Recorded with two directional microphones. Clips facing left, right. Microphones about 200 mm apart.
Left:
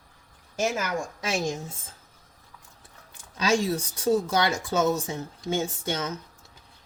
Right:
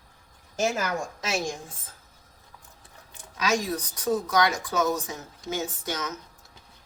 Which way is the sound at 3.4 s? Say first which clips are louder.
Left 2 dB; 30° left (ahead or behind).